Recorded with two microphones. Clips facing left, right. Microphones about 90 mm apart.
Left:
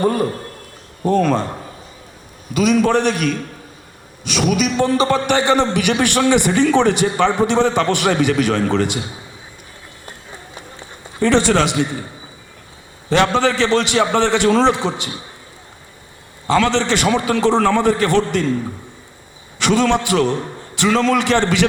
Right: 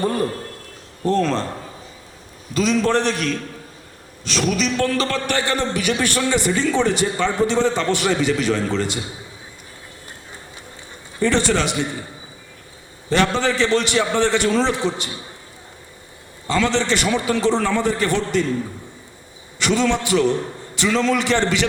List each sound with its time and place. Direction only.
0.0 s a man's voice: 10° left (ahead or behind)
2.5 s a man's voice: 10° left (ahead or behind)
5.5 s a man's voice: 65° left (ahead or behind)
11.2 s a man's voice: 65° left (ahead or behind)
13.1 s a man's voice: 65° left (ahead or behind)
16.5 s a man's voice: 65° left (ahead or behind)
19.5 s a man's voice: 60° left (ahead or behind)